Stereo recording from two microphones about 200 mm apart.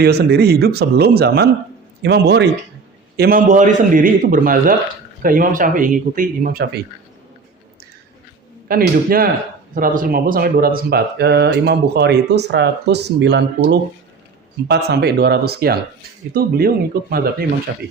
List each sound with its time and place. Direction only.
0.0 s speech: 55° right (ahead or behind)
3.2 s speech: 45° right (ahead or behind)
8.6 s speech: 45° right (ahead or behind)
17.7 s speech: 60° right (ahead or behind)